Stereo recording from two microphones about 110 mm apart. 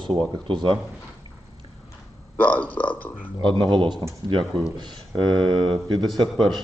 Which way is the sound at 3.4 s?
45° right (ahead or behind).